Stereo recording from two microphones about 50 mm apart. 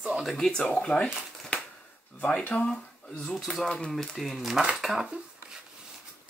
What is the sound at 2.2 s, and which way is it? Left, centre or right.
Speech, centre.